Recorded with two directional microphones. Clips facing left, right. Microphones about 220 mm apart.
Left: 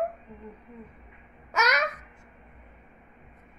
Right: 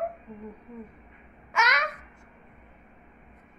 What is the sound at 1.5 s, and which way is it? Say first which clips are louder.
Babbling: left 2 dB; 40° left (ahead or behind).